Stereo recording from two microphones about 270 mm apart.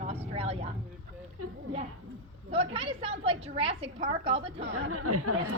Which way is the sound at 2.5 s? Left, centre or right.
Centre.